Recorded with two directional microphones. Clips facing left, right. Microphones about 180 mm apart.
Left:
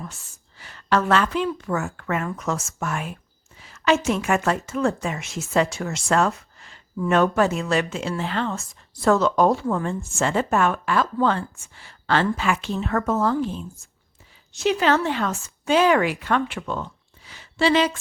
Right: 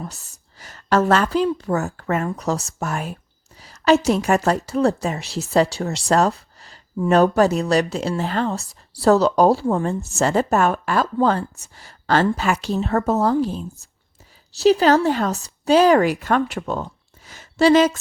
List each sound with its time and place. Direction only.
0.0 s a woman's voice: 40° right (ahead or behind)